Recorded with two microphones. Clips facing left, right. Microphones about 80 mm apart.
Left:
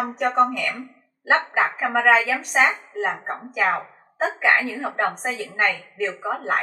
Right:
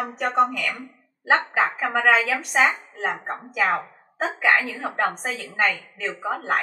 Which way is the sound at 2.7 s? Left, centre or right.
Centre.